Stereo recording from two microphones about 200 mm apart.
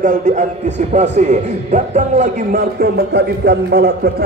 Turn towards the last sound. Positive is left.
turn(degrees=-55)  # may be behind; listen again after turning